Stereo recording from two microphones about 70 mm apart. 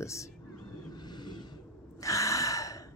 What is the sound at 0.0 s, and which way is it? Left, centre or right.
Speech, left.